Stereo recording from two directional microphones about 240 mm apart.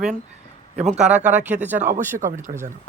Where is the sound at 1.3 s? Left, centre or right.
Centre.